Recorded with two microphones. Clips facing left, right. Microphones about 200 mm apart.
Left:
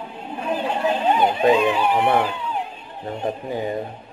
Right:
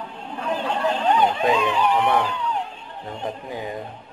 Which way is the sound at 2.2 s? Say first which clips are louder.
Even; 10° left (ahead or behind).